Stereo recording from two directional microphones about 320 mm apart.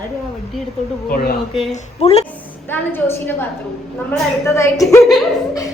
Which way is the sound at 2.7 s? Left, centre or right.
Centre.